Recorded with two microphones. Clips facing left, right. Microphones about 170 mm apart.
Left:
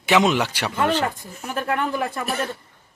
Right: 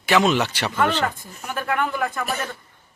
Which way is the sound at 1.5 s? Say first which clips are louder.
Even; 35° left (ahead or behind).